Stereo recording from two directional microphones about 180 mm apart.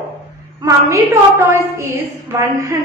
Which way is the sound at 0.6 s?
15° right (ahead or behind).